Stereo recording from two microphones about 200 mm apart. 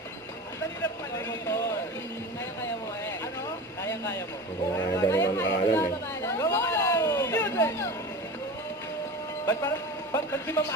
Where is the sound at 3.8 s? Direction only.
15° left (ahead or behind).